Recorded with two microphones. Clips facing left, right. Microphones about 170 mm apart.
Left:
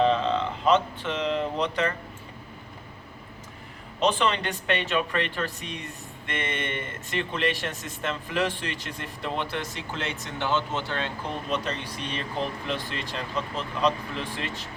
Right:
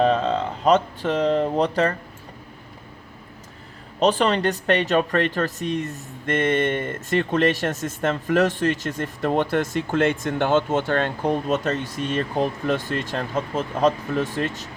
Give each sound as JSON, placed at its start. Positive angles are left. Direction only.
{"t": 0.0, "sound": "speech", "side_deg": -45}
{"t": 4.0, "sound": "speech", "side_deg": -40}